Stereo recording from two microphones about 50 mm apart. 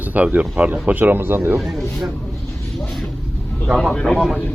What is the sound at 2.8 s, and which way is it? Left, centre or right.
Vehicle, centre.